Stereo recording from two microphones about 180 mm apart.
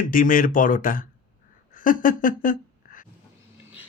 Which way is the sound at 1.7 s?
50° left (ahead or behind).